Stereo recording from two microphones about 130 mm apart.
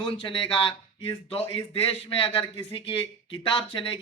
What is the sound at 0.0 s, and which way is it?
Speech, 40° left (ahead or behind).